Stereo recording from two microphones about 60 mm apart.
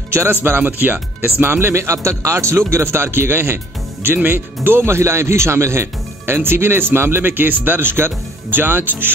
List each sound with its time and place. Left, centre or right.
0.1 s speech: right